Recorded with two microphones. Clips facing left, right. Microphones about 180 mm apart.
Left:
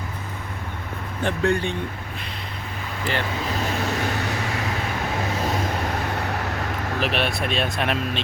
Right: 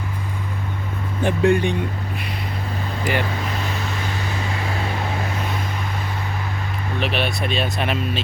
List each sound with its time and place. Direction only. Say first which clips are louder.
1.2 s speech: right 5 dB; 15° right (ahead or behind)
3.0 s speech: right 3 dB; 10° right (ahead or behind)
7.0 s speech: right 1 dB; centre (ahead or behind)